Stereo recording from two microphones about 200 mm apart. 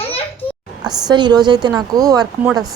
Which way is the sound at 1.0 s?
20° right (ahead or behind).